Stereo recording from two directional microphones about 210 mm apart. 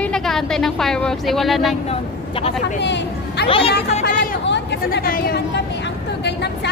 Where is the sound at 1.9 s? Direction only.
30° left (ahead or behind).